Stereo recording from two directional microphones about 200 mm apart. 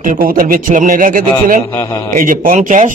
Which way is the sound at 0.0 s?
45° right (ahead or behind).